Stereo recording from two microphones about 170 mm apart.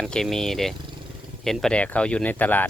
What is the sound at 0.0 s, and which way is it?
Speech, centre (ahead or behind).